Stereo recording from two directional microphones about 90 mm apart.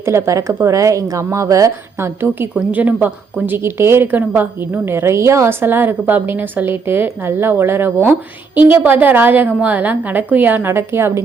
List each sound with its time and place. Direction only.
0.0 s a woman's voice: 30° right (ahead or behind)
2.6 s a woman's voice: 20° right (ahead or behind)